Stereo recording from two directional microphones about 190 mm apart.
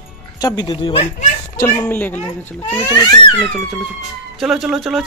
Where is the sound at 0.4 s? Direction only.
20° left (ahead or behind).